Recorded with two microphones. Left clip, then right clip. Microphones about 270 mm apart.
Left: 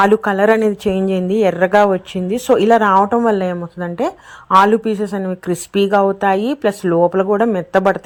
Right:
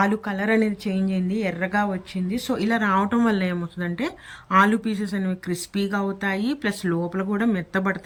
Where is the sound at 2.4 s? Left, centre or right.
Left.